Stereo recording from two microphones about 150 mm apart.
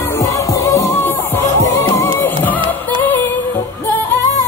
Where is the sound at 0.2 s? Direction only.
20° left (ahead or behind).